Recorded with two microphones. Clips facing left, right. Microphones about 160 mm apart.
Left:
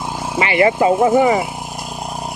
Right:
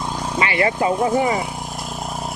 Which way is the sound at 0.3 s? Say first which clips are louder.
Left 5 dB; 25° left (ahead or behind).